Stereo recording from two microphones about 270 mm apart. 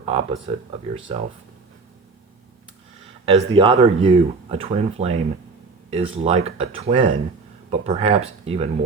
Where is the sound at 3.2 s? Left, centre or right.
Right.